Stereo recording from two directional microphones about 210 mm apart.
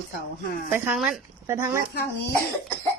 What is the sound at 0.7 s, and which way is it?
Speech, 5° right (ahead or behind).